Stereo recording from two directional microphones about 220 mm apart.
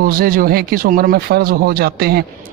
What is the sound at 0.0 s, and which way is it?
Speech, 45° right (ahead or behind).